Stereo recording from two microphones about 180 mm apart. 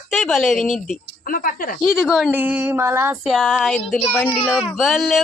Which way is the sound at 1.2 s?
50° left (ahead or behind).